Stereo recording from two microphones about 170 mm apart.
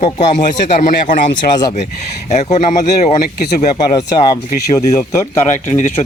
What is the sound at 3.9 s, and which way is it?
Speech, 25° left (ahead or behind).